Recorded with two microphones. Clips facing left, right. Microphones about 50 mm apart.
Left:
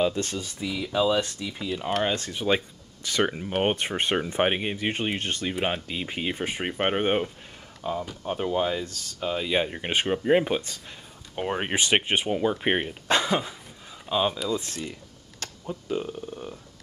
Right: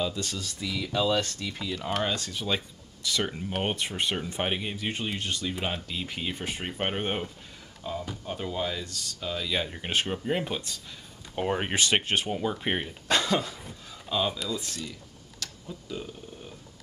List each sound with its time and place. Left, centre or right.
0.0 s speech: left
0.4 s speech: centre
2.0 s speech: left
3.3 s speech: centre
3.7 s speech: left
5.6 s speech: left
11.3 s speech: centre
14.5 s speech: left